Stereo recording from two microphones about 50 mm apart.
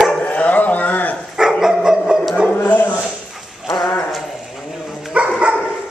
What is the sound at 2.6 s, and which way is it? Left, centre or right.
Dog, left.